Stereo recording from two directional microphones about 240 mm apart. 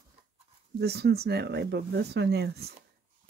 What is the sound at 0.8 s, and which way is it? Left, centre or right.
Speech, right.